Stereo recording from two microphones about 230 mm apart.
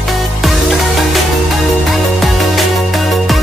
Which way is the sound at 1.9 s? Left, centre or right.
Centre.